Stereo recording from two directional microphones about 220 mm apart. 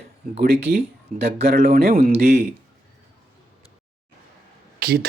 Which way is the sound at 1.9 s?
30° right (ahead or behind).